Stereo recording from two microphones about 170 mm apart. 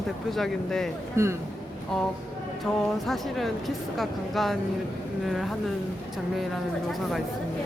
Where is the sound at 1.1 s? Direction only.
15° right (ahead or behind).